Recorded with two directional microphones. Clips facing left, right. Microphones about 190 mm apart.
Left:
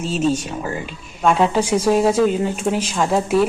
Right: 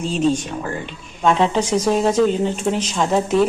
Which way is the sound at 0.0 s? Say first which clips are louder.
Right 1 dB; 5° left (ahead or behind).